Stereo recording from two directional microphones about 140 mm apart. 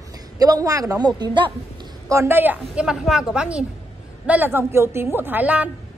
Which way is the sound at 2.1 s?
20° right (ahead or behind).